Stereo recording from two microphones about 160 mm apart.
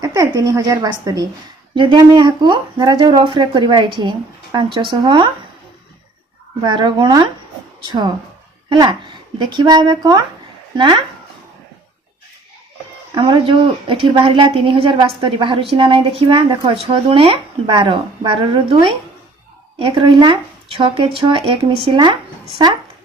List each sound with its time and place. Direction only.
0.0 s speech: 20° right (ahead or behind)
6.6 s a woman's voice: 30° right (ahead or behind)
13.1 s a woman's voice: 30° right (ahead or behind)